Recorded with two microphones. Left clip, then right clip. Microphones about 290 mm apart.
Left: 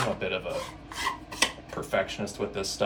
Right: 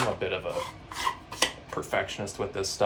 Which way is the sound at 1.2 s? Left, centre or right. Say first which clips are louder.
Left 3 dB; centre.